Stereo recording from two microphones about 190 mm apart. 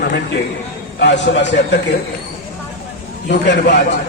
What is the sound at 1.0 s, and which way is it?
Speech, 70° left (ahead or behind).